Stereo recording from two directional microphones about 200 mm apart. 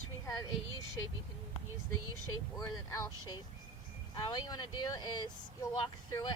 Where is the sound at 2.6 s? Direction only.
15° left (ahead or behind).